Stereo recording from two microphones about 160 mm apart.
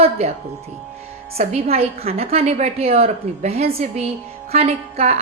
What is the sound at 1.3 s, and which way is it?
A woman's voice, 40° right (ahead or behind).